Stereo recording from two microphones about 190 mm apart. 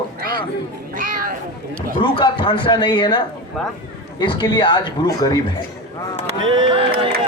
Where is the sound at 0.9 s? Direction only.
45° right (ahead or behind).